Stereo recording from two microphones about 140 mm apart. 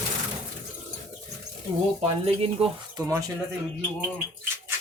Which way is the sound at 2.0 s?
45° right (ahead or behind).